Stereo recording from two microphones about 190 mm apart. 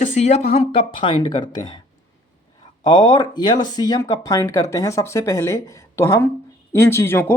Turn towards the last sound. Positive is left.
turn(degrees=15)  # may be behind; listen again after turning